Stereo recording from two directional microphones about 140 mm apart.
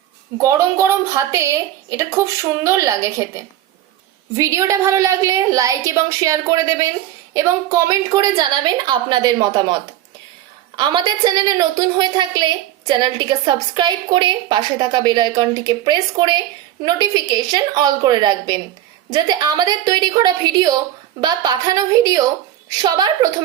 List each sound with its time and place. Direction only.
0.4 s a woman's voice: 20° right (ahead or behind)
10.8 s a woman's voice: 30° right (ahead or behind)